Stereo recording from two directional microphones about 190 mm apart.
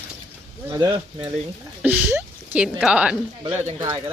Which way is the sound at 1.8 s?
5° right (ahead or behind).